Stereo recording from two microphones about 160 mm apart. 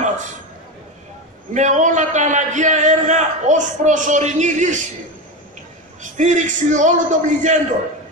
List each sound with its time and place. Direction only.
1.5 s a man's voice: 50° right (ahead or behind)
6.1 s a man's voice: 50° right (ahead or behind)